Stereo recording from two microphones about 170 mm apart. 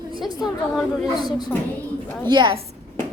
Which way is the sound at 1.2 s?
25° left (ahead or behind).